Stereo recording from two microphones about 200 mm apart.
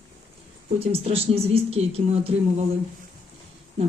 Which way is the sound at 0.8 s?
30° right (ahead or behind).